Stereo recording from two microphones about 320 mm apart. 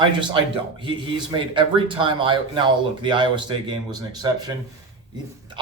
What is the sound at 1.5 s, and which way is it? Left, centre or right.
Speech, centre.